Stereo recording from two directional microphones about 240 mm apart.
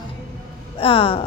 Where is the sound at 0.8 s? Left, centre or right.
Left.